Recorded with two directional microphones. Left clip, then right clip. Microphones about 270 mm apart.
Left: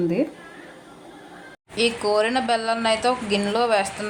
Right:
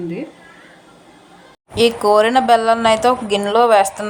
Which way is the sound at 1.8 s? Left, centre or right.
Centre.